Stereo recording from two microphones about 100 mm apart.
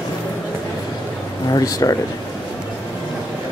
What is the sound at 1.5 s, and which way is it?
Speech, 35° left (ahead or behind).